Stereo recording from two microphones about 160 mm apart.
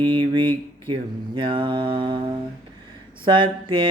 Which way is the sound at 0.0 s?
30° right (ahead or behind).